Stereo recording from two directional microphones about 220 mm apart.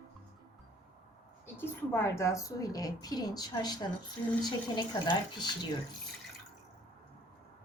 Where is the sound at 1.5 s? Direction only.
10° left (ahead or behind).